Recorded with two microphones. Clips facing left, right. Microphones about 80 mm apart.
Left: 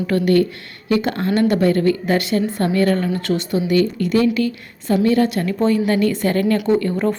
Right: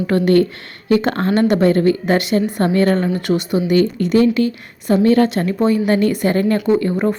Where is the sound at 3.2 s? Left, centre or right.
Centre.